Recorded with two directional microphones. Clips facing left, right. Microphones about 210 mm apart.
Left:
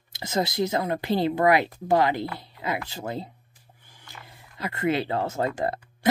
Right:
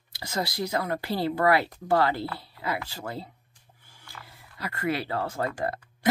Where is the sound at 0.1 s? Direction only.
20° left (ahead or behind).